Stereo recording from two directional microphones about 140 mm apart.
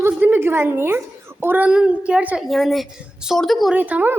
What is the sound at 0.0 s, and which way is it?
A woman's voice, 15° right (ahead or behind).